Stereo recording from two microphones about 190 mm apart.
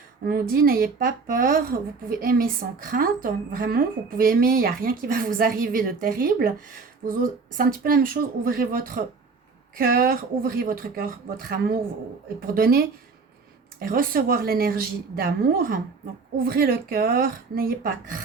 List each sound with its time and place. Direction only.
0.3 s a woman's voice: 50° right (ahead or behind)